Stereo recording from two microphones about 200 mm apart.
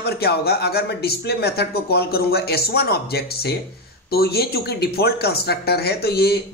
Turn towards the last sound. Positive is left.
turn(degrees=55)  # may be behind; listen again after turning